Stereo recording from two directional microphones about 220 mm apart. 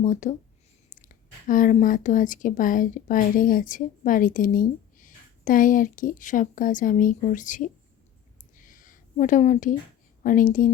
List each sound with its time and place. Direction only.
0.0 s a woman's voice: 35° left (ahead or behind)
8.5 s a sound: 40° left (ahead or behind)
10.2 s a woman's voice: 35° left (ahead or behind)